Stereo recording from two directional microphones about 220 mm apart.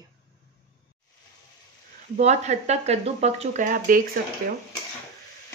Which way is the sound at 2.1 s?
30° right (ahead or behind).